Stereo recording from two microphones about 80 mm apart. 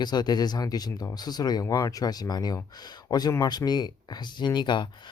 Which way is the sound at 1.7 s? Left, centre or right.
Left.